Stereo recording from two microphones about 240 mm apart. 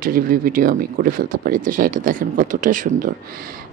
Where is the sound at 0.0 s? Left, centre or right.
Right.